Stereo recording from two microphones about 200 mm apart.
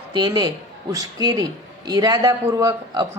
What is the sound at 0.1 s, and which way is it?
A man's voice, 20° right (ahead or behind).